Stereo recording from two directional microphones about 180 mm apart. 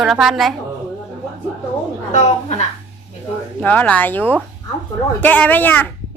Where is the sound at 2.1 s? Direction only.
40° left (ahead or behind).